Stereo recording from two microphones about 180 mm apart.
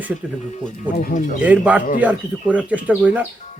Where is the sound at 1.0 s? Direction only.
45° left (ahead or behind).